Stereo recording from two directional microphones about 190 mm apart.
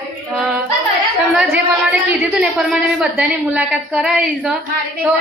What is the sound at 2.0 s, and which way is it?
A woman's voice, 5° right (ahead or behind).